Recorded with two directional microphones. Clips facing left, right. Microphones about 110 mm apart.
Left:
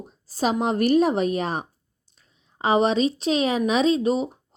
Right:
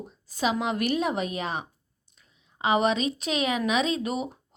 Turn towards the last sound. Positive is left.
turn(degrees=30)  # may be behind; listen again after turning